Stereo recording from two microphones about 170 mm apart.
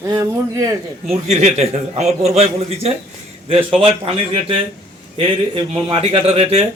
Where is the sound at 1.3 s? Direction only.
45° right (ahead or behind).